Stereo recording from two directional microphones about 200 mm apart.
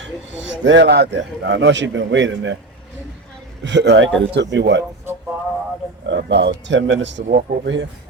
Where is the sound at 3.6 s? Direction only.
60° right (ahead or behind).